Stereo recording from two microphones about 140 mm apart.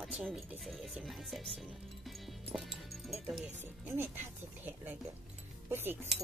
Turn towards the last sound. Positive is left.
turn(degrees=-15)  # may be behind; listen again after turning